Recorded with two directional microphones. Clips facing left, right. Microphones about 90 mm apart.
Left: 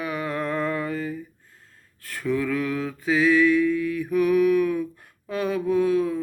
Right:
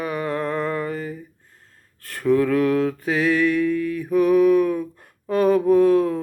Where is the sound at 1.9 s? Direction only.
45° right (ahead or behind).